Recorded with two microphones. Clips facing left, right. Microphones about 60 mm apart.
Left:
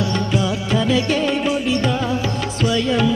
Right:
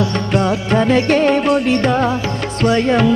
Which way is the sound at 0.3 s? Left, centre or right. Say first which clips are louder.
Right 7 dB; right.